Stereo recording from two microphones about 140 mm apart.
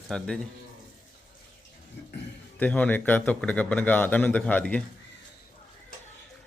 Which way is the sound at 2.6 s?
10° left (ahead or behind).